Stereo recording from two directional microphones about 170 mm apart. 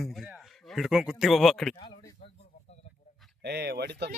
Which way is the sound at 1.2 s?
Centre (ahead or behind).